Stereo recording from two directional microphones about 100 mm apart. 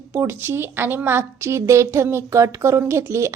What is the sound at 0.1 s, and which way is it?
A woman's voice, 25° right (ahead or behind).